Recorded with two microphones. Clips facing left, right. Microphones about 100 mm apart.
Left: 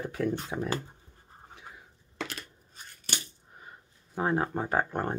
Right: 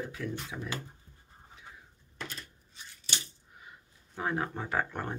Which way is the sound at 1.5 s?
70° left (ahead or behind).